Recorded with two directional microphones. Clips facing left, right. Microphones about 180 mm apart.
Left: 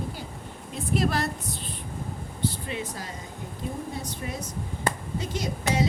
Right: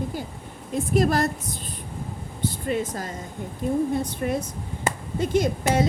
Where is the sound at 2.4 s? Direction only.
50° right (ahead or behind).